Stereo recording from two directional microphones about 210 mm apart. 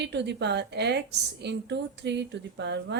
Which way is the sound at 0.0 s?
55° right (ahead or behind).